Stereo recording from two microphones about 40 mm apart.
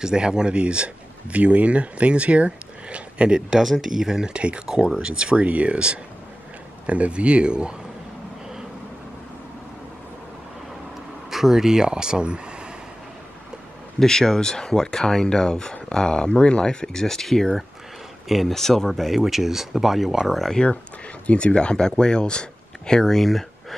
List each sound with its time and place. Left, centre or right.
0.0 s speech: centre
3.3 s speech: centre
4.3 s speech: right
11.2 s speech: centre
13.9 s speech: centre
16.8 s speech: centre
18.5 s speech: centre
21.3 s speech: left
21.5 s speech: left
23.1 s speech: centre